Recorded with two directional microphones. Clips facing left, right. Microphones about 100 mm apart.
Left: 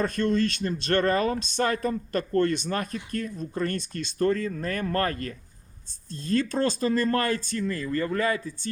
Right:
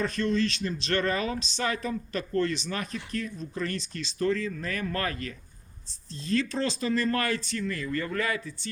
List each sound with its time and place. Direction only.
0.0 s speech: 50° left (ahead or behind); by 8.4 s 30° left (ahead or behind)